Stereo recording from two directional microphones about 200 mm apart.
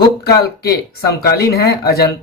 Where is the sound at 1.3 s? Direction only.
50° left (ahead or behind).